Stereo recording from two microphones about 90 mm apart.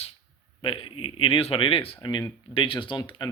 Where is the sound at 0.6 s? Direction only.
75° left (ahead or behind).